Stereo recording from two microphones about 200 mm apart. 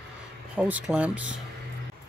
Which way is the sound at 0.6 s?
5° right (ahead or behind).